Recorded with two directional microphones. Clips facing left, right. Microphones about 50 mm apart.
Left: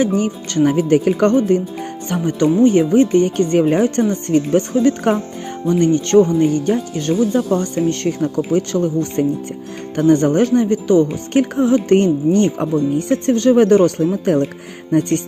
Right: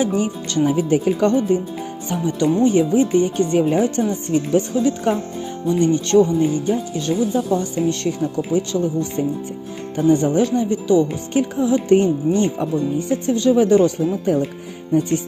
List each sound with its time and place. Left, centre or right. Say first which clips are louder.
0.0 s speech: left 3 dB; left
6.4 s speech: left 3 dB; left
11.9 s speech: left 3 dB; left
14.3 s speech: left 3 dB; left